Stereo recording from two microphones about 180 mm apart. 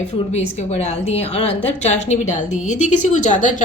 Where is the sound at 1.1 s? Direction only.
35° left (ahead or behind).